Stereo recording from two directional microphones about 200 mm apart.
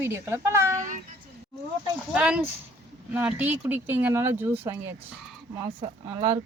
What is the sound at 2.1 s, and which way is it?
Speech, 5° right (ahead or behind).